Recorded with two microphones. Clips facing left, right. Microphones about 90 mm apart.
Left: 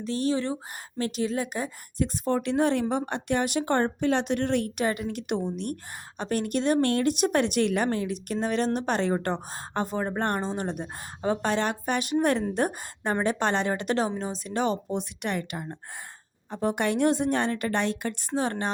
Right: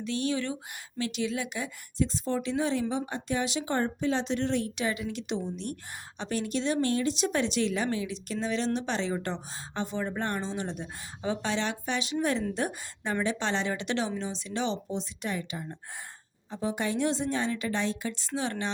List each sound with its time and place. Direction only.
0.0 s speech: 40° left (ahead or behind)
2.1 s a woman's voice: 55° left (ahead or behind)